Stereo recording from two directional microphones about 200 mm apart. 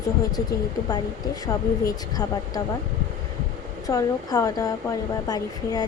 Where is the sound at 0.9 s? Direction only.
15° left (ahead or behind).